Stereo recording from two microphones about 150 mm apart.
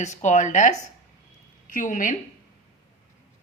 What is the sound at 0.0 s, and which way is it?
A woman's voice, 50° left (ahead or behind).